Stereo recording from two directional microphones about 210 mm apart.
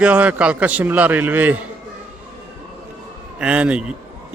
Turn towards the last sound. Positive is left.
turn(degrees=-5)  # may be behind; listen again after turning